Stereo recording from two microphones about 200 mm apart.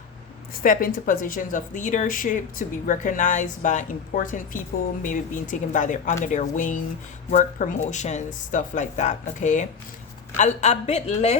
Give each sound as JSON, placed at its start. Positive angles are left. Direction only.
{"t": 0.6, "sound": "speech", "side_deg": 45}